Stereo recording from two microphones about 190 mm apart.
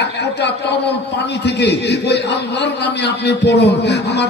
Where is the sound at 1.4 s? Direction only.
60° left (ahead or behind).